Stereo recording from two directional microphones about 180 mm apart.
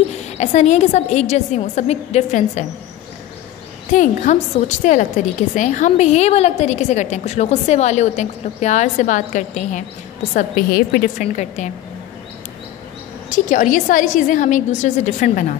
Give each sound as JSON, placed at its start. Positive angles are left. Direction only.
{"t": 0.4, "sound": "a woman's voice", "side_deg": 40}
{"t": 3.9, "sound": "a woman's voice", "side_deg": 45}
{"t": 10.3, "sound": "a woman's voice", "side_deg": 55}
{"t": 13.3, "sound": "a woman's voice", "side_deg": 45}